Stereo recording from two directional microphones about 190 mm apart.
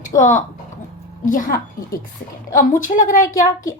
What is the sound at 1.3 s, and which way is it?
A woman's voice, 45° left (ahead or behind).